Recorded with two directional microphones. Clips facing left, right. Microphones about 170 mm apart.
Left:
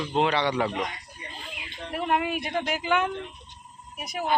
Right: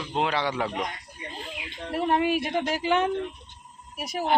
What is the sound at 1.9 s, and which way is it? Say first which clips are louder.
Speech: right 3 dB; 30° right (ahead or behind).